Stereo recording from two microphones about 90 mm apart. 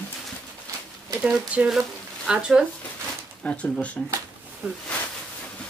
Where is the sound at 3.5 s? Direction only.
10° left (ahead or behind).